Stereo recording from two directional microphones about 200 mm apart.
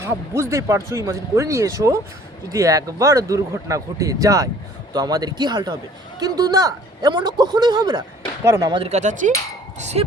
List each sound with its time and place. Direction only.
0.0 s speech: 15° right (ahead or behind)
8.8 s speech: 35° right (ahead or behind)